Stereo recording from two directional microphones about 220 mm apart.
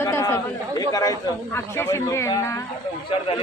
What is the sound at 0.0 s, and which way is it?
Chatter, 10° left (ahead or behind).